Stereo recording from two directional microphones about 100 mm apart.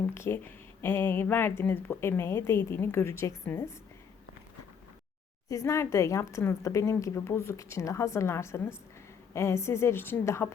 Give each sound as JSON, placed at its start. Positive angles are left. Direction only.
{"t": 0.1, "sound": "speech", "side_deg": 25}
{"t": 5.5, "sound": "speech", "side_deg": 30}